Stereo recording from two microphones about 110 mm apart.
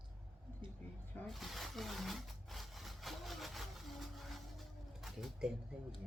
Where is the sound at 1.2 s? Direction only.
Centre (ahead or behind).